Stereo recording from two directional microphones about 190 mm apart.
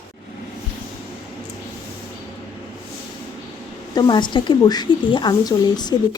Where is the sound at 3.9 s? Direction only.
25° left (ahead or behind).